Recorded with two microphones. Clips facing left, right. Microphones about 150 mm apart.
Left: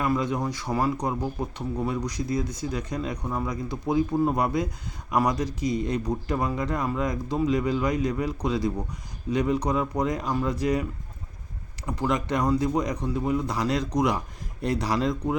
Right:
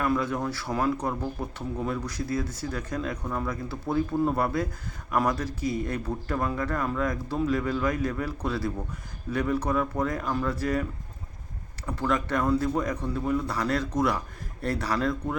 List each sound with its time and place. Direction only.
0.0 s speech: 15° left (ahead or behind)
11.9 s speech: 15° left (ahead or behind)